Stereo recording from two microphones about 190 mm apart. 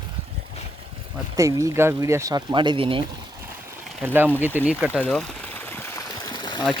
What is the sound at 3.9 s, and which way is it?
Speech, 10° right (ahead or behind).